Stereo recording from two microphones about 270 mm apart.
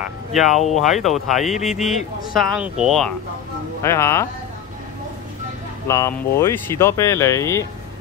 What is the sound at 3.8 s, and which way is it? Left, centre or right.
Speech, centre.